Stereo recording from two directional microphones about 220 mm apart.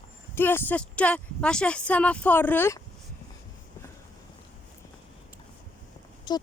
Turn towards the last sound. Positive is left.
turn(degrees=20)  # may be behind; listen again after turning